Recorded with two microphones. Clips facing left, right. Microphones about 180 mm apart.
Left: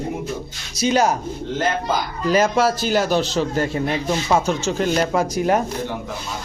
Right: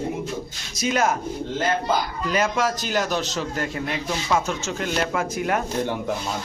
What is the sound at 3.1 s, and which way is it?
Speech, 30° left (ahead or behind).